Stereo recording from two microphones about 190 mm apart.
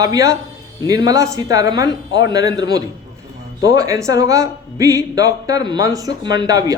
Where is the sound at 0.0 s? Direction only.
20° right (ahead or behind).